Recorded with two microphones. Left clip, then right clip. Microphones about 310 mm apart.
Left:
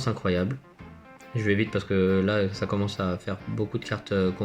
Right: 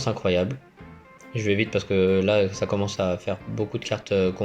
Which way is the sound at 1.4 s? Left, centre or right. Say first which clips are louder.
Right 2 dB; centre.